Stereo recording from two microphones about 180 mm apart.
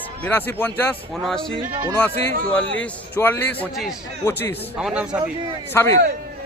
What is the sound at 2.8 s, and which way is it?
A man's voice, 10° left (ahead or behind).